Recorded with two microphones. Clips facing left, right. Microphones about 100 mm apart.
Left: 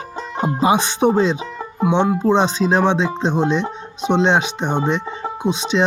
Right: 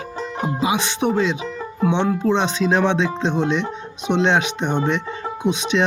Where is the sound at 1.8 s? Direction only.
15° left (ahead or behind).